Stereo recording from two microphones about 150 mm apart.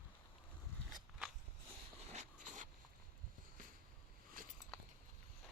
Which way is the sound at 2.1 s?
55° right (ahead or behind).